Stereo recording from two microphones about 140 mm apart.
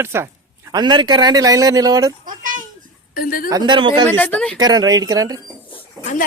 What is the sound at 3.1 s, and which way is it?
Speech, 90° left.